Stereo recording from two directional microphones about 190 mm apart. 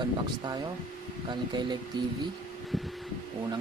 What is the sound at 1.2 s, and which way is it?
Speech, 25° right (ahead or behind).